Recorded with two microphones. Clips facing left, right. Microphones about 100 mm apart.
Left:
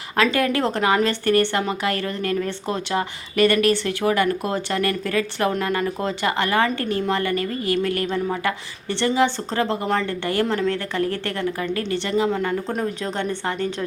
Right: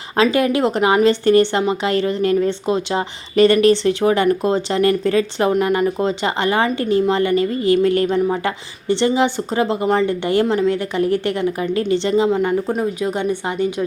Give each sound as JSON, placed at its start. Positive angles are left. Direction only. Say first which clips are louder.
{"t": 0.2, "sound": "a woman's voice", "louder": "right 4 dB", "side_deg": -20}
{"t": 12.6, "sound": "a woman's voice", "louder": "right 5 dB", "side_deg": -10}